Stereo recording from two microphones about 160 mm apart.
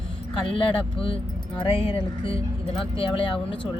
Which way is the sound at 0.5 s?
35° left (ahead or behind).